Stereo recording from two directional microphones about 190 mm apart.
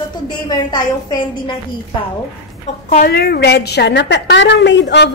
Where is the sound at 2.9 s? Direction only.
50° left (ahead or behind).